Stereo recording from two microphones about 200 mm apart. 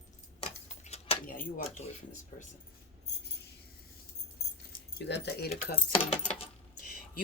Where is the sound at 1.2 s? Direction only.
45° left (ahead or behind).